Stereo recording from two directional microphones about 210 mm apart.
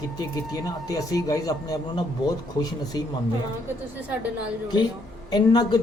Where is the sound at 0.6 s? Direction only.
15° left (ahead or behind).